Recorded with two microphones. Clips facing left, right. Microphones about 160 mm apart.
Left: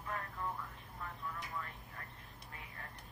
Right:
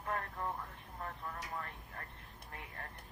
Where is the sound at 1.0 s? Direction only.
45° right (ahead or behind).